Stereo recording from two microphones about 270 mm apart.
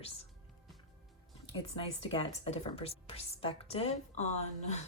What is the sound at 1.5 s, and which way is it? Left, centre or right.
Speech, left.